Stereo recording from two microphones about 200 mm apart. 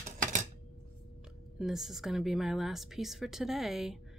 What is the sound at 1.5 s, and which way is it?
A woman's voice, centre (ahead or behind).